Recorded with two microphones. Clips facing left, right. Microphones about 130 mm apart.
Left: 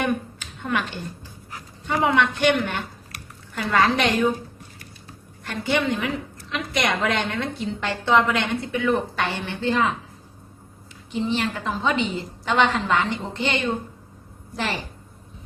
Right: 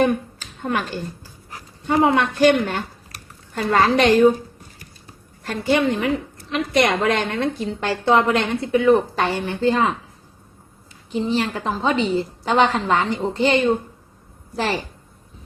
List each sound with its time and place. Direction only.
0.0 s speech: 35° right (ahead or behind)
1.5 s pant: 35° right (ahead or behind)
2.0 s a woman's voice: 35° right (ahead or behind)
5.4 s a woman's voice: 35° right (ahead or behind)
11.1 s a woman's voice: 35° right (ahead or behind)